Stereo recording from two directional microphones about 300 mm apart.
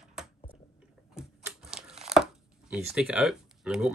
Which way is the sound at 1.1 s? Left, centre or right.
Centre.